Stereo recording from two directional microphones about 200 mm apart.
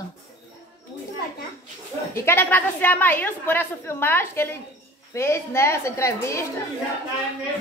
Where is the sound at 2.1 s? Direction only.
10° left (ahead or behind).